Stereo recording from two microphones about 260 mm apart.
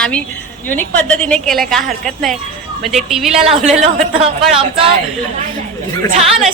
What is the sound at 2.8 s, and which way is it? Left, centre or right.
Speech, centre.